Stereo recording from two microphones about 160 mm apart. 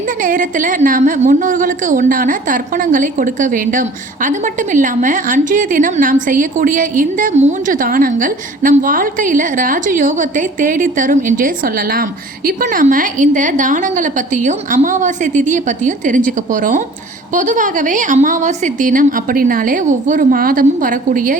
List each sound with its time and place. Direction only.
0.2 s a woman's voice: 55° right (ahead or behind)